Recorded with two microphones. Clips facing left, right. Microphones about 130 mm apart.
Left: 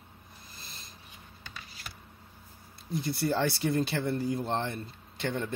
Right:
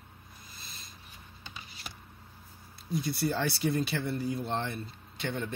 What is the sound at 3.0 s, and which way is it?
Speech, 35° left (ahead or behind).